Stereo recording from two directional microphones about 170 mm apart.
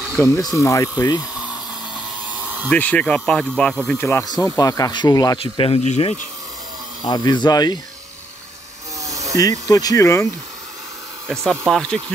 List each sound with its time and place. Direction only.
0.3 s speech: 20° left (ahead or behind)
1.3 s a sound: 5° right (ahead or behind)
2.7 s speech: 5° left (ahead or behind); by 6.2 s 40° left (ahead or behind)
7.1 s speech: 25° left (ahead or behind)
9.4 s speech: 20° left (ahead or behind)
11.7 s speech: 5° left (ahead or behind)